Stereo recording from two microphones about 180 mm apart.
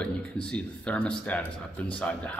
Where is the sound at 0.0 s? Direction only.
5° left (ahead or behind).